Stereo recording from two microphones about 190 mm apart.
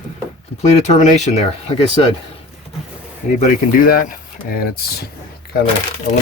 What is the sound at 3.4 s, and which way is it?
Speech, 50° left (ahead or behind).